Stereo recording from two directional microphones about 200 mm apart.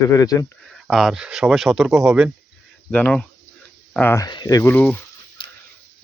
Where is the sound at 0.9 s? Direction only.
Centre (ahead or behind).